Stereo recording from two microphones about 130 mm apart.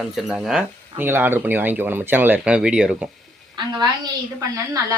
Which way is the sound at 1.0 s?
15° right (ahead or behind).